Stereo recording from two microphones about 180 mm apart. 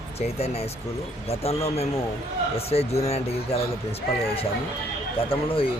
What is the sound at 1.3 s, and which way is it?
Speech, 35° left (ahead or behind).